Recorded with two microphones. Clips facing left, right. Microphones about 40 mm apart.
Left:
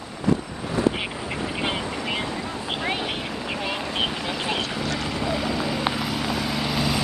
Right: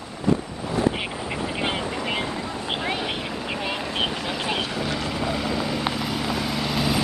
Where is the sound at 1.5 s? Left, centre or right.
Centre.